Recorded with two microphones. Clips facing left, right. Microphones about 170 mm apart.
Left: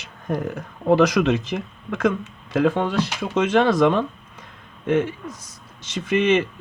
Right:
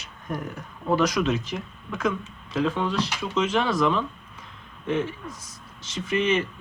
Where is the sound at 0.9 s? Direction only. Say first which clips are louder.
Left 6 dB; 70° left (ahead or behind).